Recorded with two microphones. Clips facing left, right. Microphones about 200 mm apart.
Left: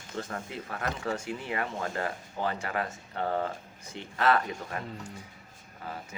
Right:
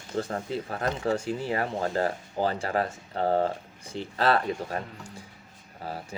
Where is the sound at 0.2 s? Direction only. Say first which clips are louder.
Right 7 dB; 35° right (ahead or behind).